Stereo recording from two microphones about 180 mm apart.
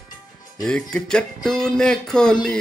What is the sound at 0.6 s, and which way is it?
Speech, 5° left (ahead or behind).